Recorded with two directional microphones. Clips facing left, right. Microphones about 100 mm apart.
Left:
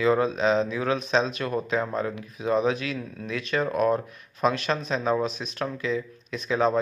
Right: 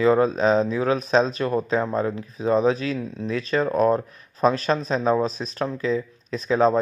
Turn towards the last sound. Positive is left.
turn(degrees=-35)  # may be behind; listen again after turning